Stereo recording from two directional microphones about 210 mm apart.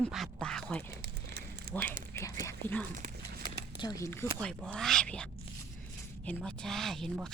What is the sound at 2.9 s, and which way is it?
Horse, 45° right (ahead or behind).